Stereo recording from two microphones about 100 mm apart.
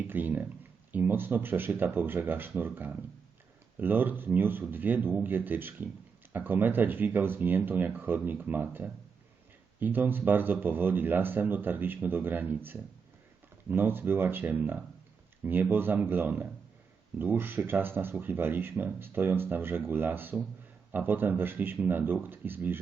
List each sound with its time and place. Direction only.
0.1 s speech: 20° right (ahead or behind)